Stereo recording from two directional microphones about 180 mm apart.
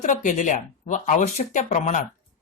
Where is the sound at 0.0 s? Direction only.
45° left (ahead or behind).